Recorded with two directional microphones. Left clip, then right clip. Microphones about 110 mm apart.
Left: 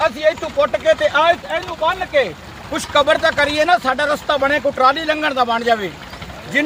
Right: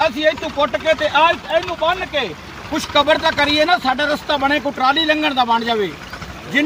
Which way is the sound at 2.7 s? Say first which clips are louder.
Even; 45° left (ahead or behind).